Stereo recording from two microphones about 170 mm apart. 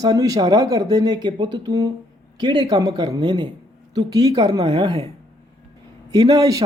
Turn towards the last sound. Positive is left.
turn(degrees=-20)  # may be behind; listen again after turning